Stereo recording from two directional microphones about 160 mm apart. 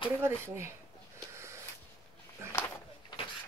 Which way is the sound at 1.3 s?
15° right (ahead or behind).